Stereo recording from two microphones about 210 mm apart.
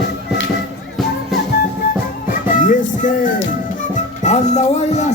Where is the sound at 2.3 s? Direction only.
40° left (ahead or behind).